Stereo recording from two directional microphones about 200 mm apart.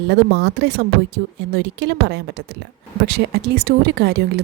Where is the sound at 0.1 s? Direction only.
55° right (ahead or behind).